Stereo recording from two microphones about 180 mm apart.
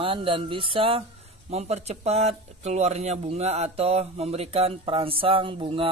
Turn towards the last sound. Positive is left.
turn(degrees=-30)  # may be behind; listen again after turning